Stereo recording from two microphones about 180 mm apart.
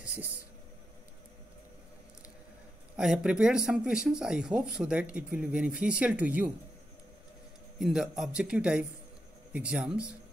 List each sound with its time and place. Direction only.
0.0 s a sound: 10° right (ahead or behind)
3.0 s speech: 5° right (ahead or behind)
7.8 s speech: centre (ahead or behind)